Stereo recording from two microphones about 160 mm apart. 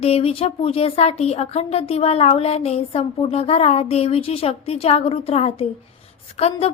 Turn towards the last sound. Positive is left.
turn(degrees=40)  # may be behind; listen again after turning